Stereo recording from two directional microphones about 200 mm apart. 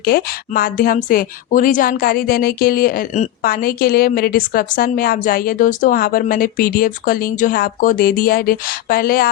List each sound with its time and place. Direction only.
0.0 s a woman's voice: 50° left (ahead or behind)